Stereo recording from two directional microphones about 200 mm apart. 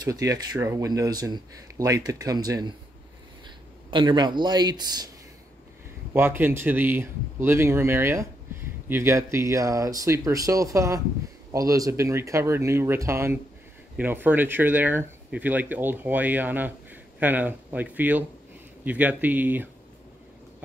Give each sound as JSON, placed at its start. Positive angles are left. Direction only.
{"t": 0.0, "sound": "speech", "side_deg": -20}
{"t": 3.9, "sound": "speech", "side_deg": -25}
{"t": 6.1, "sound": "speech", "side_deg": -10}